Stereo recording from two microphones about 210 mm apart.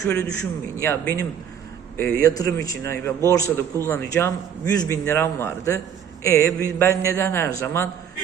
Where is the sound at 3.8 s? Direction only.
10° left (ahead or behind).